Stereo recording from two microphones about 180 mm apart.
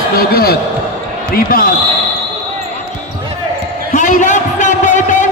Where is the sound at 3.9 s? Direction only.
45° left (ahead or behind).